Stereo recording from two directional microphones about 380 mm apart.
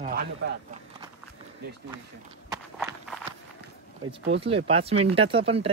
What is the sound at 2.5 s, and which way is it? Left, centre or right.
Walk, centre.